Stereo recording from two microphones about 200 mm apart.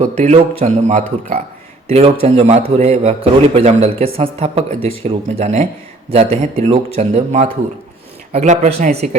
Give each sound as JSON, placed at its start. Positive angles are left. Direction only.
{"t": 0.0, "sound": "a man's voice", "side_deg": -40}